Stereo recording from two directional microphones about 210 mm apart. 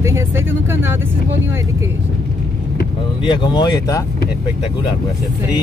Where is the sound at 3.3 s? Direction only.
20° left (ahead or behind).